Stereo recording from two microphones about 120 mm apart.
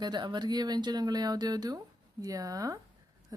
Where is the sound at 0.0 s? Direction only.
40° right (ahead or behind).